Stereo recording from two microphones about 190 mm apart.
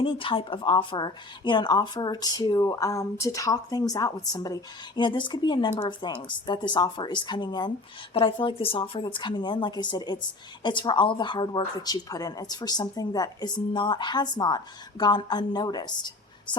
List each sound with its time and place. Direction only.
0.0 s speech: 30° left (ahead or behind)